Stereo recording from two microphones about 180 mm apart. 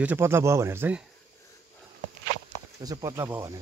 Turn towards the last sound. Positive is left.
turn(degrees=-15)  # may be behind; listen again after turning